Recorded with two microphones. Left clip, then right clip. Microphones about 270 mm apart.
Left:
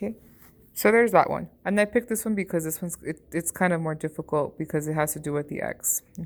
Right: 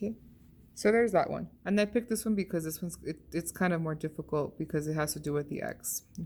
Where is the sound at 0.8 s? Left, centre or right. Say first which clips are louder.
Left 7 dB; left.